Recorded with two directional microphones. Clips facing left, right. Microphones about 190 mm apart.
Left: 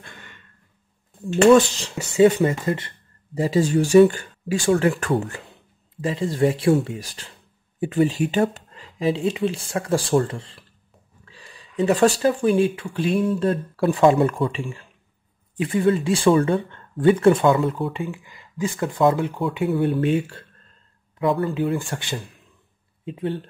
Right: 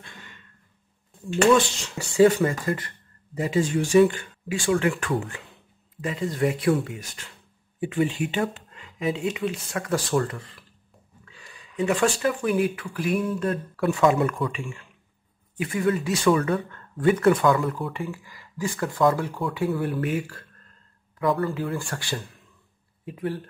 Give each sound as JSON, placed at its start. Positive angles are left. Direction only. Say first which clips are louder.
{"t": 1.3, "sound": "speech", "louder": "left 5 dB", "side_deg": 40}
{"t": 2.0, "sound": "speech", "louder": "left 2 dB", "side_deg": 20}